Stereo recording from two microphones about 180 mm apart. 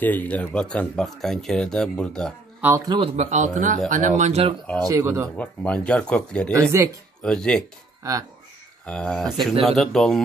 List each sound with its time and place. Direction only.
0.0 s speech: 10° left (ahead or behind)
2.6 s speech: 15° right (ahead or behind)
3.2 s a man's voice: 40° right (ahead or behind)
4.8 s speech: 15° right (ahead or behind)
5.3 s speech: 5° left (ahead or behind)
6.7 s speech: 15° right (ahead or behind)
7.2 s speech: 5° left (ahead or behind)
8.0 s speech: 20° right (ahead or behind)
8.8 s speech: 5° left (ahead or behind)